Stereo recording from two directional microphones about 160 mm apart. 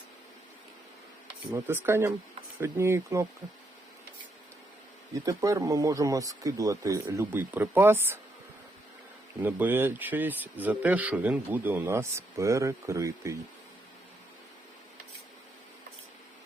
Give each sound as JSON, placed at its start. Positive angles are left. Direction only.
{"t": 1.5, "sound": "speech", "side_deg": -15}
{"t": 5.2, "sound": "speech", "side_deg": -20}
{"t": 9.4, "sound": "speech", "side_deg": -10}